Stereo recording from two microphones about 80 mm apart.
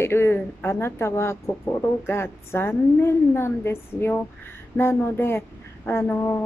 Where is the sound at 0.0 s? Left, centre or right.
Left.